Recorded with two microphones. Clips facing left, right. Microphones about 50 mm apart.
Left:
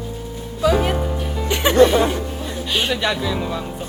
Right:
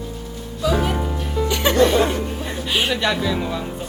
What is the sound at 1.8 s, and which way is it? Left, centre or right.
Speech, centre.